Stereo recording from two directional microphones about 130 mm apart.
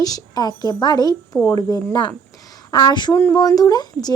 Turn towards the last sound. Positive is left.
turn(degrees=30)  # may be behind; listen again after turning